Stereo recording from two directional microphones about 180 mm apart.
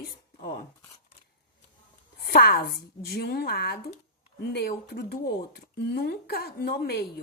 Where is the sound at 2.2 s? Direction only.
60° left (ahead or behind).